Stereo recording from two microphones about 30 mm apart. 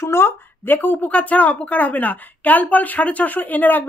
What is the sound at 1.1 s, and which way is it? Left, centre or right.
A woman's voice, left.